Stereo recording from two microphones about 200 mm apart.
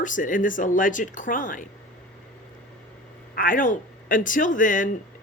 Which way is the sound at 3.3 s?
45° left (ahead or behind).